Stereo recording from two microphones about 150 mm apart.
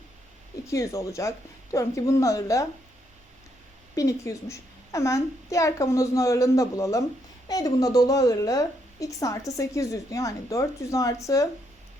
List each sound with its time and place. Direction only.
0.7 s a woman's voice: 20° left (ahead or behind)
3.9 s a woman's voice: 20° left (ahead or behind)